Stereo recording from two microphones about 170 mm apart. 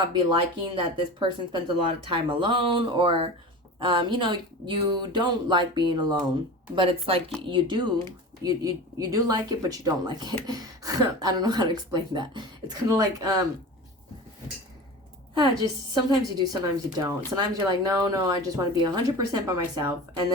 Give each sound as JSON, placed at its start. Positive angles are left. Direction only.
{"t": 0.6, "sound": "speech", "side_deg": -30}
{"t": 15.4, "sound": "speech", "side_deg": -25}